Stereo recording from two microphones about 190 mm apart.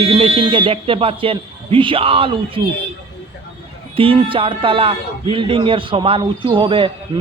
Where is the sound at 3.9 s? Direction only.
30° right (ahead or behind).